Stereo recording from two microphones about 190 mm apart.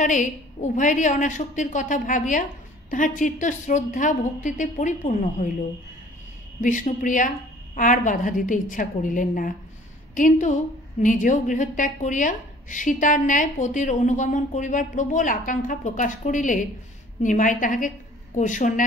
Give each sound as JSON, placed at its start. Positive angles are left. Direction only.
{"t": 0.0, "sound": "a woman's voice", "side_deg": 40}
{"t": 6.6, "sound": "speech", "side_deg": 40}